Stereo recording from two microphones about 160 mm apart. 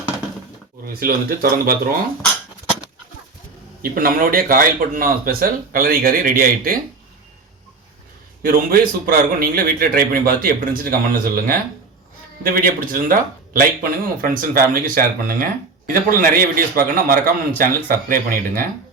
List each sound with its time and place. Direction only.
0.9 s speech: 65° right (ahead or behind)
3.9 s a man's voice: 60° right (ahead or behind)
8.4 s a man's voice: 65° right (ahead or behind)